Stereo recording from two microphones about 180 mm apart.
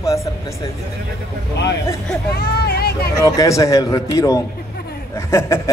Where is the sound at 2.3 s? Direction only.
60° left (ahead or behind).